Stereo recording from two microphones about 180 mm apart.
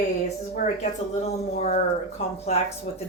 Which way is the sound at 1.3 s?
35° left (ahead or behind).